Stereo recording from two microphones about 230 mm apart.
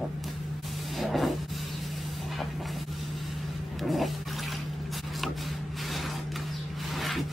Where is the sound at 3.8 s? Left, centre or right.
Centre.